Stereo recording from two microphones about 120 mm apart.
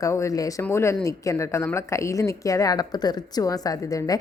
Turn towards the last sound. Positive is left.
turn(degrees=30)  # may be behind; listen again after turning